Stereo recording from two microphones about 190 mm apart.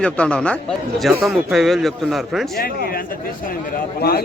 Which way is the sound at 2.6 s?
50° left (ahead or behind).